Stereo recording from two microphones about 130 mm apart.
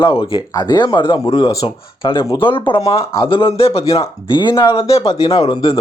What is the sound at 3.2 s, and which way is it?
Speech, 40° left (ahead or behind).